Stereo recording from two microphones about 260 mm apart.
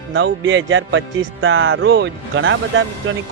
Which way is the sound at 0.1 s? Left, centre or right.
Right.